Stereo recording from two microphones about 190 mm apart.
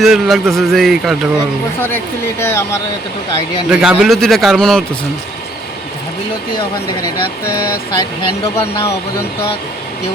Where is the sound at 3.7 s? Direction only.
5° right (ahead or behind).